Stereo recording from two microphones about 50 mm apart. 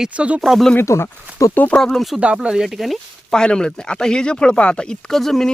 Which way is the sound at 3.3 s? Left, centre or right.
Centre.